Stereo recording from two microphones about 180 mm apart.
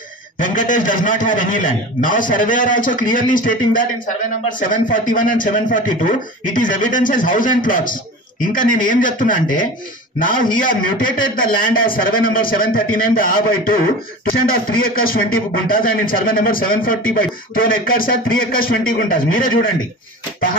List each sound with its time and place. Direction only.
0.4 s speech: 50° left (ahead or behind)